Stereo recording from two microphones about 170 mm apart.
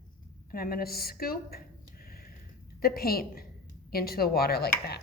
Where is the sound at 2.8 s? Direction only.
60° left (ahead or behind).